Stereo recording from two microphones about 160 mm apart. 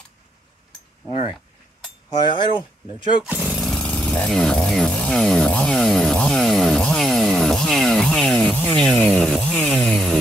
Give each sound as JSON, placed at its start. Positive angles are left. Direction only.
{"t": 2.0, "sound": "cutlery", "side_deg": 30}
{"t": 3.3, "sound": "speech", "side_deg": -5}